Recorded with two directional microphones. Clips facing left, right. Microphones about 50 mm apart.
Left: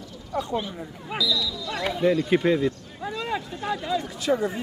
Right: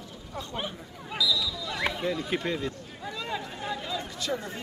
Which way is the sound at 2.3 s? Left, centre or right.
Centre.